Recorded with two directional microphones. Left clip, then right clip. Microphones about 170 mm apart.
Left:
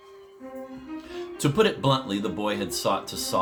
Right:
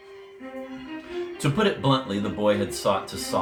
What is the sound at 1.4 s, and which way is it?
Speech, 65° left (ahead or behind).